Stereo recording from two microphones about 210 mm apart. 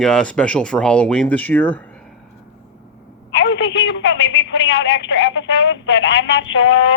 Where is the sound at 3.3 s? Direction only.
60° left (ahead or behind).